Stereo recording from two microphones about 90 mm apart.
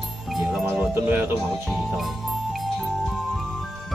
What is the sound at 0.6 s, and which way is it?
Speech, 20° right (ahead or behind).